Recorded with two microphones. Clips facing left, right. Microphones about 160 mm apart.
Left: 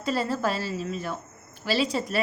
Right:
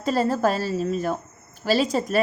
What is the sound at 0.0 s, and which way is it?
A woman's voice, 45° right (ahead or behind).